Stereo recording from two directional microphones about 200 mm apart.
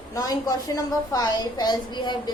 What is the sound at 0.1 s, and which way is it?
A woman's voice, 15° left (ahead or behind).